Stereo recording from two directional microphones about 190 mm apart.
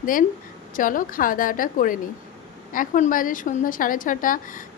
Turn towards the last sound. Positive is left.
turn(degrees=45)  # may be behind; listen again after turning